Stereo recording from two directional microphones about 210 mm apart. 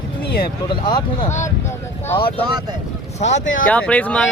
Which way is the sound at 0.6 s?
20° left (ahead or behind).